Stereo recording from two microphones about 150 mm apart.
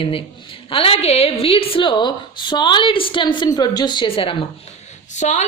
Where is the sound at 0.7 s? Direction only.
40° left (ahead or behind).